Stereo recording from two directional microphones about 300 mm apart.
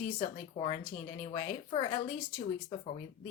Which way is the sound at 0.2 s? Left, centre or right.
Centre.